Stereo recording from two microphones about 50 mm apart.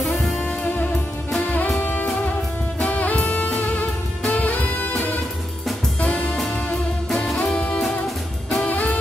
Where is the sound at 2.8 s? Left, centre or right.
Left.